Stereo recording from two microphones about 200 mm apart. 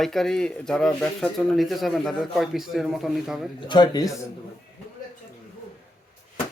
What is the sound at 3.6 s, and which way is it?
Speech, 20° left (ahead or behind).